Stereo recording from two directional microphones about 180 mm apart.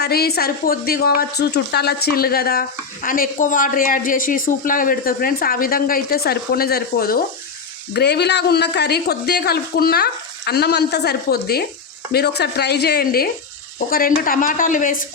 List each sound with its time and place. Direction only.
0.0 s a woman's voice: 60° left (ahead or behind)